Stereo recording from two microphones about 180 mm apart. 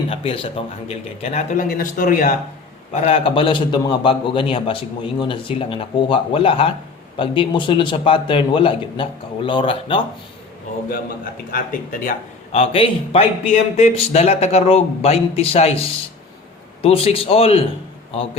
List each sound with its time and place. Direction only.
0.1 s speech: 30° left (ahead or behind); by 2.3 s 50° left (ahead or behind)
2.9 s a man's voice: 35° left (ahead or behind)
11.5 s speech: 50° left (ahead or behind); by 17.7 s 35° left (ahead or behind)